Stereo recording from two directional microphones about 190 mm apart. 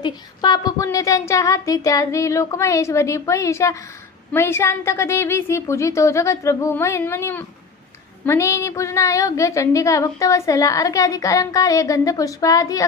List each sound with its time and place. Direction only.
0.0 s a woman's voice: 20° left (ahead or behind)